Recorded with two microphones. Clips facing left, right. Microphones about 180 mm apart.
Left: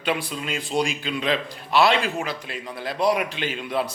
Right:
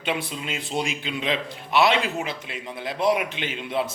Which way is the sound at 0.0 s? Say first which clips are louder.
Left 2 dB; 25° right (ahead or behind).